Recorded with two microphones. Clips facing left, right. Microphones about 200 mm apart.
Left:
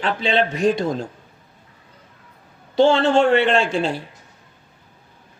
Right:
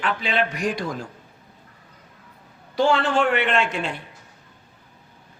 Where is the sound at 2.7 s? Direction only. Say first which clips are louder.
Left 5 dB; 25° left (ahead or behind).